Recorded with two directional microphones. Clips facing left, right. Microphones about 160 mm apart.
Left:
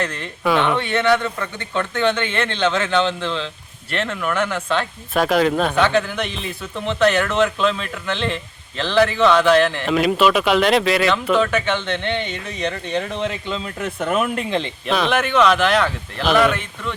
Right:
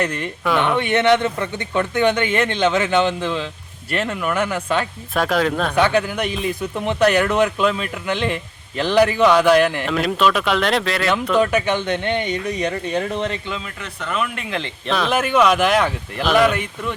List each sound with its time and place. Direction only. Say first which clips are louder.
0.0 s a man's voice: right 1 dB; 15° right (ahead or behind)
5.1 s speech: left 2 dB; 5° left (ahead or behind)
5.7 s a man's voice: even; 10° right (ahead or behind)
9.9 s speech: left 2 dB; 5° left (ahead or behind)
11.3 s a man's voice: right 2 dB; 10° right (ahead or behind)
13.7 s speech: left 6 dB; 50° left (ahead or behind)
14.8 s a man's voice: right 1 dB; centre (ahead or behind)